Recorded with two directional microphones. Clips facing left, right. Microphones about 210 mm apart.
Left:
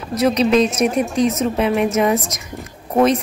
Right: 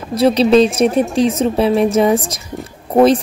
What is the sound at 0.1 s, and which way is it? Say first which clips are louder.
Speech: right 4 dB; 30° right (ahead or behind).